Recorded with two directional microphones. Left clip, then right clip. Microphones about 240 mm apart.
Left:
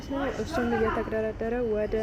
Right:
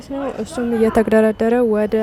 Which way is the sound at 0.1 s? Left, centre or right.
Right.